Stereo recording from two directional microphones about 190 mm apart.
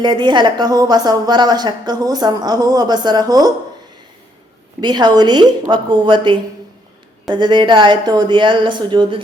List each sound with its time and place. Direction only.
0.0 s a woman's voice: 25° right (ahead or behind)
4.8 s a woman's voice: 20° right (ahead or behind)